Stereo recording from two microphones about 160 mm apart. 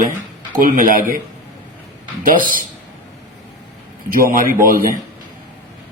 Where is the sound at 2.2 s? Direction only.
60° right (ahead or behind).